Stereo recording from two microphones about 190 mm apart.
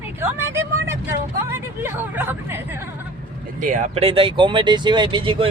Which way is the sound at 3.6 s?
40° right (ahead or behind).